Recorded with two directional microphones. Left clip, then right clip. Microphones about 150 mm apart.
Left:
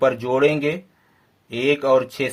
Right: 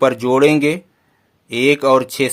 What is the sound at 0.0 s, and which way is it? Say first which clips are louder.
Speech: right 5 dB; 50° right (ahead or behind).